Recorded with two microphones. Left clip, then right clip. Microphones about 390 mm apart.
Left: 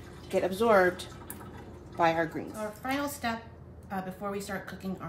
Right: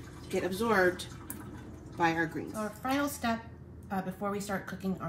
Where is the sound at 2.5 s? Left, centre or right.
Centre.